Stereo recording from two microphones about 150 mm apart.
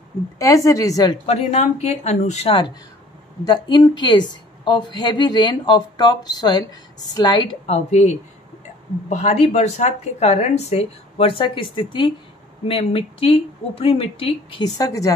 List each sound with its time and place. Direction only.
0.4 s a woman's voice: 20° left (ahead or behind)
1.2 s a woman's voice: 45° left (ahead or behind); by 7.4 s 30° left (ahead or behind)
7.6 s a woman's voice: 45° left (ahead or behind)
14.6 s a woman's voice: 20° left (ahead or behind)